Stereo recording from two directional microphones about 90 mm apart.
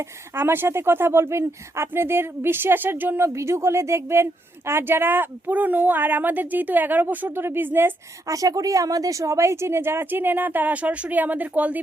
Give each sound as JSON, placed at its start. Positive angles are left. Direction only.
{"t": 0.3, "sound": "a woman's voice", "side_deg": -25}
{"t": 8.3, "sound": "a woman's voice", "side_deg": -40}